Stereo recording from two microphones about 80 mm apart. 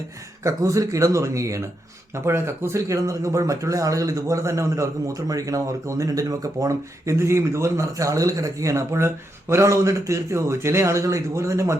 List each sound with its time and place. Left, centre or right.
0.4 s speech: right